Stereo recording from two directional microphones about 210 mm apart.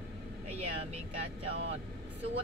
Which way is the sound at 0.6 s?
30° right (ahead or behind).